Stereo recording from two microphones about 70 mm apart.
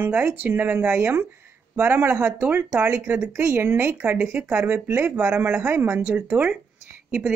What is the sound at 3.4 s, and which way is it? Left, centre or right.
Speech, right.